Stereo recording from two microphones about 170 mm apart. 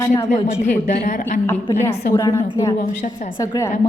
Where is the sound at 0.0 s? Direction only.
15° left (ahead or behind).